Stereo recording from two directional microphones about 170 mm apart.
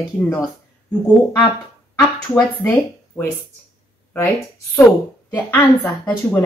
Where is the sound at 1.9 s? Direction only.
10° left (ahead or behind).